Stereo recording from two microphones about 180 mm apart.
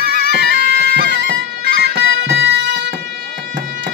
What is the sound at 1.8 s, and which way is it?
Music, 75° right (ahead or behind).